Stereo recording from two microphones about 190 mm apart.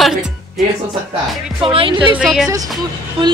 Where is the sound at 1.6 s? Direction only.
30° right (ahead or behind).